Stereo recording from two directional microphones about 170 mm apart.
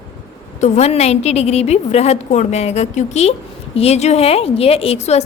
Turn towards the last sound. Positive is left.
turn(degrees=40)  # may be behind; listen again after turning